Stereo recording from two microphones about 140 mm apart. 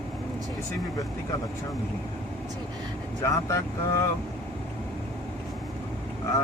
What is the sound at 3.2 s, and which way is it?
Speech, 20° left (ahead or behind).